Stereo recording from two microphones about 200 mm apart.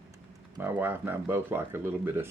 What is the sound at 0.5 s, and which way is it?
Speech, 10° right (ahead or behind).